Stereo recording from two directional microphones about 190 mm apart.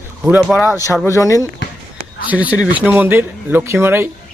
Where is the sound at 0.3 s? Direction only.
5° right (ahead or behind).